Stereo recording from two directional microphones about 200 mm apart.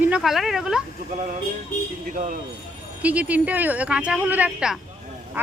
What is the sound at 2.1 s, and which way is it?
Speech, 45° right (ahead or behind).